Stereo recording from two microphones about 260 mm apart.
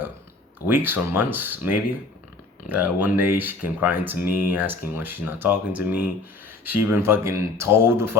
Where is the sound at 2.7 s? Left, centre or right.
Left.